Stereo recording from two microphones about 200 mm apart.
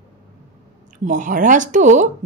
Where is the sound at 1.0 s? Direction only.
40° right (ahead or behind).